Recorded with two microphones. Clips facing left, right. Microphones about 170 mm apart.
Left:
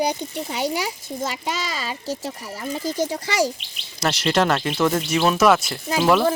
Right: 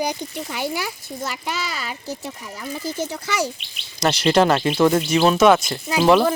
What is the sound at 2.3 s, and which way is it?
Speech, 35° left (ahead or behind).